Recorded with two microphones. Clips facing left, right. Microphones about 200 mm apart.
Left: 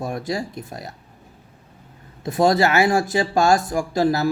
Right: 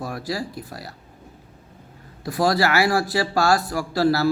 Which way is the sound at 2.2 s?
20° left (ahead or behind).